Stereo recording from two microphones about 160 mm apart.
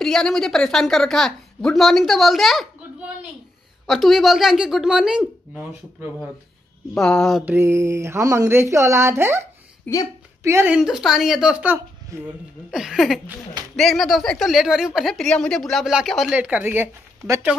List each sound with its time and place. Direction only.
0.0 s a woman's voice: 5° left (ahead or behind)
3.8 s a woman's voice: centre (ahead or behind)
7.4 s speech: 15° right (ahead or behind)
9.9 s speech: 10° left (ahead or behind)
10.4 s a woman's voice: 15° right (ahead or behind)
12.1 s speech: 20° right (ahead or behind)
12.7 s a woman's voice: centre (ahead or behind)